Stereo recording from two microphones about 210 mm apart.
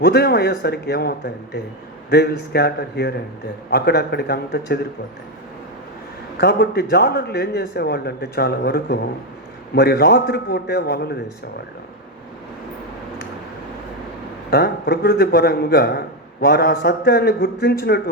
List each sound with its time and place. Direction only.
0.0 s a man's voice: 50° left (ahead or behind)
6.4 s a man's voice: 50° left (ahead or behind)
14.5 s a man's voice: 50° left (ahead or behind)